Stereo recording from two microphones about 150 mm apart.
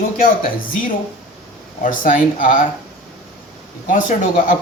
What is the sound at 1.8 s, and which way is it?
Speech, 65° left (ahead or behind).